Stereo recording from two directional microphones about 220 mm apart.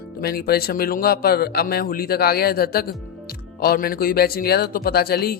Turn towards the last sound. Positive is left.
turn(degrees=45)  # may be behind; listen again after turning